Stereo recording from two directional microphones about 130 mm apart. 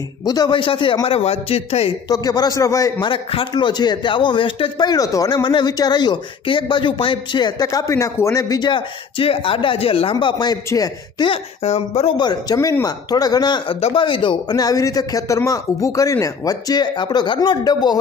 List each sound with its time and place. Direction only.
0.3 s speech: 35° left (ahead or behind); by 1.9 s 50° left (ahead or behind)
2.0 s speech: 30° left (ahead or behind)
3.1 s speech: 40° left (ahead or behind)
11.2 s speech: 55° left (ahead or behind)
12.2 s speech: 30° left (ahead or behind)
13.7 s speech: 55° left (ahead or behind)
14.0 s speech: 40° left (ahead or behind)